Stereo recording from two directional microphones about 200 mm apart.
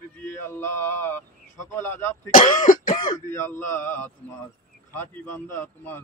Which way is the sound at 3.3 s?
10° left (ahead or behind).